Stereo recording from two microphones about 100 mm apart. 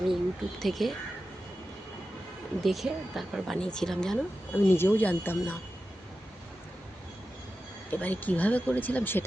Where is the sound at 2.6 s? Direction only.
Centre (ahead or behind).